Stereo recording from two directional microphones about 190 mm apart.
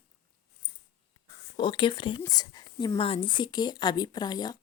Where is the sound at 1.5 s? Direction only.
25° left (ahead or behind).